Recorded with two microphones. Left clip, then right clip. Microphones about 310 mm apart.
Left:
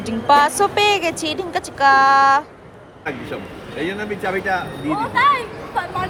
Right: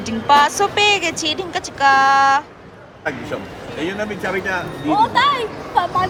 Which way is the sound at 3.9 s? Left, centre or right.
Centre.